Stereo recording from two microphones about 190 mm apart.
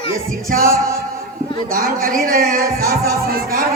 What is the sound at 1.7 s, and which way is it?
Speech, 45° right (ahead or behind).